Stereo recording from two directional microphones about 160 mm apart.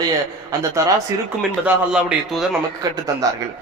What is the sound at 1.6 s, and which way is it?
Speech, 5° right (ahead or behind).